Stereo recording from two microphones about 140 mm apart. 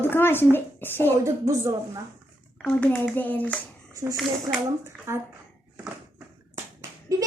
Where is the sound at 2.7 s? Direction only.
10° left (ahead or behind).